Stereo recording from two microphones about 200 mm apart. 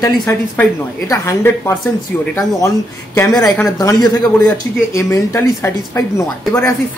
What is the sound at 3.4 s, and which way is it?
Speech, 5° left (ahead or behind).